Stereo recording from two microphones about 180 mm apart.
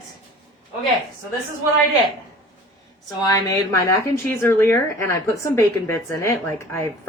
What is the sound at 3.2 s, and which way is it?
Speech, 20° left (ahead or behind).